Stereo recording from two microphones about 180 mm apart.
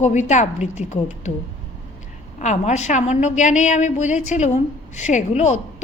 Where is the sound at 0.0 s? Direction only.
40° left (ahead or behind).